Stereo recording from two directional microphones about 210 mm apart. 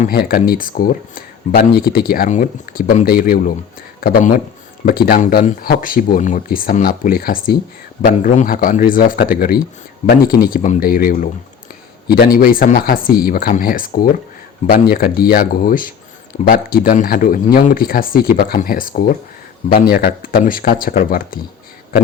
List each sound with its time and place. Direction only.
0.0 s a man's voice: 45° left (ahead or behind)